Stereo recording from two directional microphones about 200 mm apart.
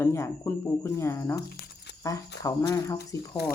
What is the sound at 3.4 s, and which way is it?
Speech, 55° left (ahead or behind).